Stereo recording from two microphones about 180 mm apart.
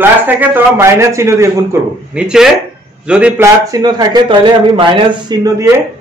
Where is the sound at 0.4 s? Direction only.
10° right (ahead or behind).